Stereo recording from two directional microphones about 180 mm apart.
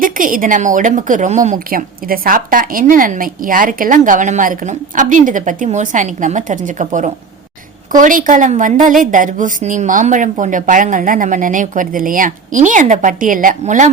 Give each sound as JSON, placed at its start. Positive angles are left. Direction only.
{"t": 0.0, "sound": "a woman's voice", "side_deg": -50}